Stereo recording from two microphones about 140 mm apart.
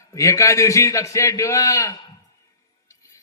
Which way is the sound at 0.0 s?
20° left (ahead or behind).